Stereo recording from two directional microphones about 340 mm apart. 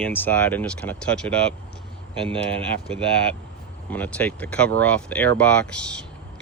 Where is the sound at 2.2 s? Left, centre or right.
Centre.